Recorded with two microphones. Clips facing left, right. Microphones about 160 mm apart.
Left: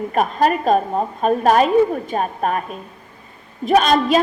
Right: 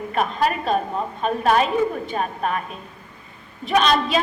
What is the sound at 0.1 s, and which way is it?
A woman's voice, 45° left (ahead or behind).